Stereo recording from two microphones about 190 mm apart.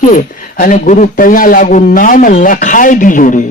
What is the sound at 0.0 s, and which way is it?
A man's voice, 45° left (ahead or behind).